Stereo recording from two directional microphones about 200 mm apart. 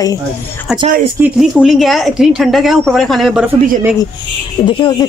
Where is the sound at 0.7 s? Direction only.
Centre (ahead or behind).